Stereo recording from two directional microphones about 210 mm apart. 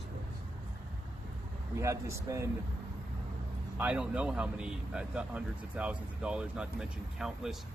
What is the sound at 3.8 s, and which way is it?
Speech, 5° right (ahead or behind).